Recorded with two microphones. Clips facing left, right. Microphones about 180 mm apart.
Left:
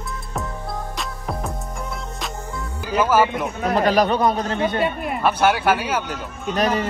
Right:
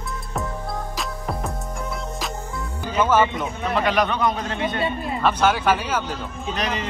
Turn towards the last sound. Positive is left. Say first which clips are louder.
# left 6 dB
turn(degrees=45)  # may be behind; listen again after turning